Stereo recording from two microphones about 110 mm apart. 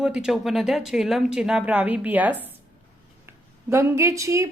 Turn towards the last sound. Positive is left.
turn(degrees=-30)  # may be behind; listen again after turning